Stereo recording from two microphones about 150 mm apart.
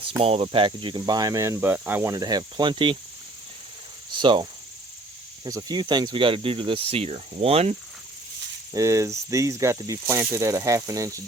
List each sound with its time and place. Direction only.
0.2 s speech: 40° right (ahead or behind); by 2.1 s 15° right (ahead or behind)
2.1 s speech: 25° right (ahead or behind)
4.2 s speech: 30° right (ahead or behind)
5.5 s speech: 25° right (ahead or behind); by 7.8 s 40° right (ahead or behind)
8.7 s speech: 20° right (ahead or behind)